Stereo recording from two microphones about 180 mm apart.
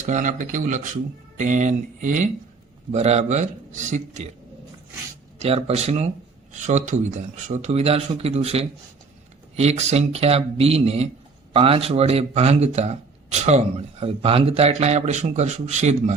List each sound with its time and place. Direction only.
0.0 s speech: 45° right (ahead or behind)
5.4 s speech: 35° right (ahead or behind)